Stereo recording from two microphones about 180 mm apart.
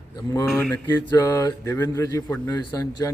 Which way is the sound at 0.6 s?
15° left (ahead or behind).